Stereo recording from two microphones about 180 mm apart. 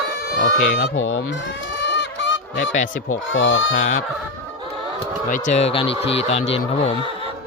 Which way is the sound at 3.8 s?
45° left (ahead or behind).